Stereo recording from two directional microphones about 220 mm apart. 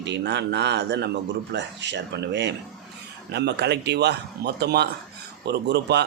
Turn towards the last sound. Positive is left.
turn(degrees=-50)  # may be behind; listen again after turning